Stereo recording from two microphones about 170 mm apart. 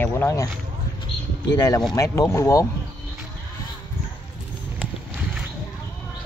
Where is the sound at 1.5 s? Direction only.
20° left (ahead or behind).